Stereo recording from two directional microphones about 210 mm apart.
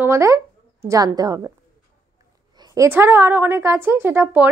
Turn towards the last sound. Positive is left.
turn(degrees=-10)  # may be behind; listen again after turning